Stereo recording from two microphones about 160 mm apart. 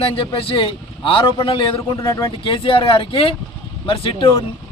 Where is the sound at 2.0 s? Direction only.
20° left (ahead or behind).